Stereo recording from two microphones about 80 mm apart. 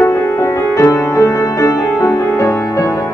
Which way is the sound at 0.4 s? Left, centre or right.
Left.